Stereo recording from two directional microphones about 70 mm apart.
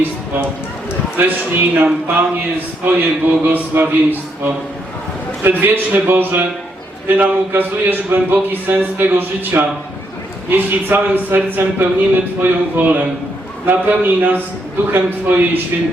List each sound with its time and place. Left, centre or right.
1.2 s speech: right